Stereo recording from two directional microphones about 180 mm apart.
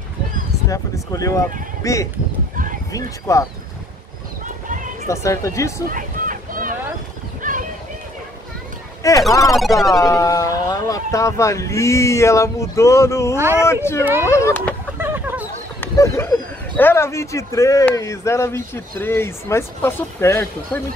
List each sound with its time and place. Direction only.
0.7 s speech: 20° left (ahead or behind)
2.5 s horse: 50° right (ahead or behind)
2.9 s speech: 20° left (ahead or behind)
5.0 s speech: 15° left (ahead or behind)
5.9 s a sound: 50° right (ahead or behind)
9.0 s speech: 20° left (ahead or behind)
9.5 s music: centre (ahead or behind)
9.9 s speech: 20° left (ahead or behind)
13.4 s speech: 15° right (ahead or behind)
14.2 s speech: 15° left (ahead or behind)
15.0 s a sound: 10° right (ahead or behind)
15.8 s speech: 15° left (ahead or behind)